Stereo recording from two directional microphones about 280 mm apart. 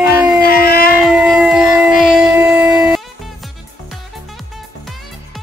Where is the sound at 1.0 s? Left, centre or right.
Centre.